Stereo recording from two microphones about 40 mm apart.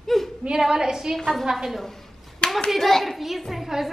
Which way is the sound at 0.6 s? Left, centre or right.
Centre.